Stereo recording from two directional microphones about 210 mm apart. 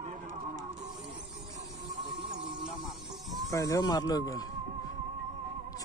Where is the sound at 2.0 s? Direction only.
30° right (ahead or behind).